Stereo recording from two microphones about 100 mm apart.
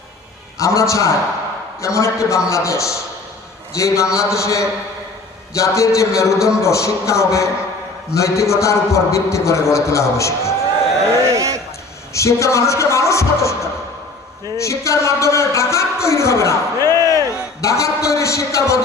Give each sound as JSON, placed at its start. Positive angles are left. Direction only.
{"t": 0.6, "sound": "speech", "side_deg": 30}
{"t": 11.3, "sound": "a sound", "side_deg": -35}
{"t": 12.1, "sound": "a man's voice", "side_deg": 30}